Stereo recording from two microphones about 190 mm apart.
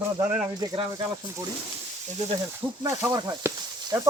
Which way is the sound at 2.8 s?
20° right (ahead or behind).